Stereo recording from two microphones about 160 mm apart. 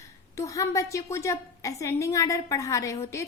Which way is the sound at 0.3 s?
20° left (ahead or behind).